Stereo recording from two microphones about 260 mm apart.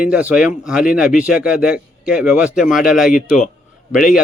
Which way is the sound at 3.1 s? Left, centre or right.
Left.